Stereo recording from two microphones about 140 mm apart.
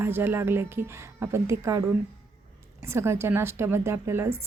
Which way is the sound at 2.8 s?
20° right (ahead or behind).